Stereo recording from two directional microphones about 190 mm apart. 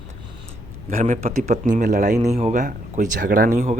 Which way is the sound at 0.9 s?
35° right (ahead or behind).